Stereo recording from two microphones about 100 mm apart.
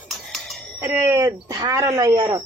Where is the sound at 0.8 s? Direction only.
25° right (ahead or behind).